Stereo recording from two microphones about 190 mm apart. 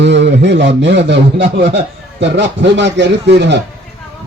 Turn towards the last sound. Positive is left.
turn(degrees=-65)  # may be behind; listen again after turning